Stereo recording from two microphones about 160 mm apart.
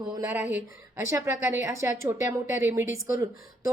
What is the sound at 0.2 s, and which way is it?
Speech, 10° right (ahead or behind).